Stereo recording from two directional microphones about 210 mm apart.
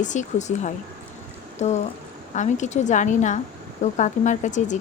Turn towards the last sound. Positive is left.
turn(degrees=35)  # may be behind; listen again after turning